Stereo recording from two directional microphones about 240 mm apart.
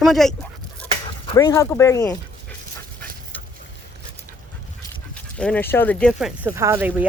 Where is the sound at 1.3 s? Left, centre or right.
Centre.